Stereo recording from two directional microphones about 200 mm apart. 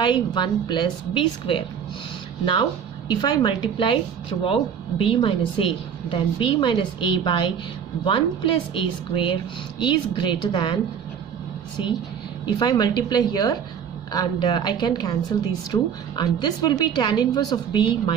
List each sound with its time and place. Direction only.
0.0 s speech: 20° left (ahead or behind)
3.1 s speech: 20° left (ahead or behind)
8.7 s speech: 25° left (ahead or behind)
12.4 s speech: 20° left (ahead or behind)